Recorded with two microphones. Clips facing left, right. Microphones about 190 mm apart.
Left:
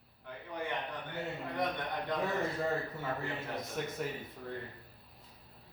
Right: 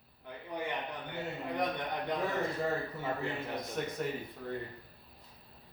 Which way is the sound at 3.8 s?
Centre (ahead or behind).